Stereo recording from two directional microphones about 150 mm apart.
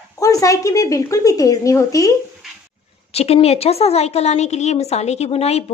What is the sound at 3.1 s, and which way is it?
A woman's voice, 45° left (ahead or behind).